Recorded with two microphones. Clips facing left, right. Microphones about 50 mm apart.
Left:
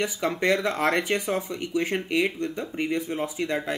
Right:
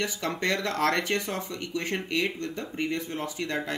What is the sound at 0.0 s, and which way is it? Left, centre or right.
Speech, centre.